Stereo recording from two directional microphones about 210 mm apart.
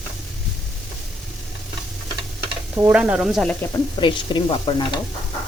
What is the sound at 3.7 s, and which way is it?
Speech, 20° left (ahead or behind).